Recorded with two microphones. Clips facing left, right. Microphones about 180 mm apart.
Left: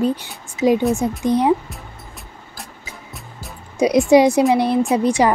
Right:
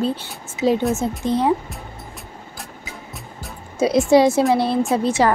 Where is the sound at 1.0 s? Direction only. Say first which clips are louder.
Left 2 dB; 15° left (ahead or behind).